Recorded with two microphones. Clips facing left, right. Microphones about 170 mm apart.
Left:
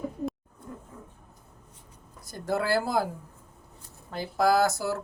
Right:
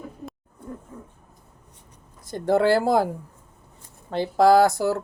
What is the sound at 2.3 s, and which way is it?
Speech, 25° right (ahead or behind).